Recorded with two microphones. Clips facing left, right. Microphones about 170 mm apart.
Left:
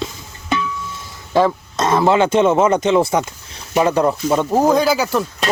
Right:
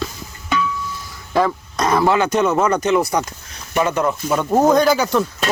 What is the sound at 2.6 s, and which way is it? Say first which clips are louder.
Speech: left 2 dB; 20° left (ahead or behind).